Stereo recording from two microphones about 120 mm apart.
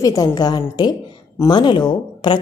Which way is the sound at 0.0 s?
30° left (ahead or behind).